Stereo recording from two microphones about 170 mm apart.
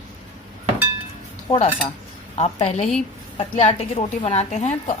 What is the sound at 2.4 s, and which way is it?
A woman's voice, 40° left (ahead or behind).